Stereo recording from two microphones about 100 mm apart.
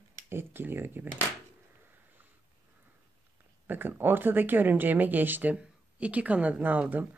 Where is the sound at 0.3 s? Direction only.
25° right (ahead or behind).